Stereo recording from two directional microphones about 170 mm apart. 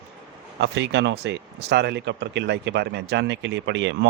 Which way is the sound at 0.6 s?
90° right.